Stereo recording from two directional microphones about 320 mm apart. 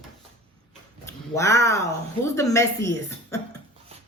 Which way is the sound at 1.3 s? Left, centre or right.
Centre.